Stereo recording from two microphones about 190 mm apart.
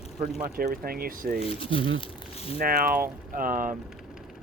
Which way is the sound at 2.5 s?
50° right (ahead or behind).